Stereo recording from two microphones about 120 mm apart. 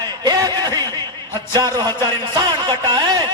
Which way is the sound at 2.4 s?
35° right (ahead or behind).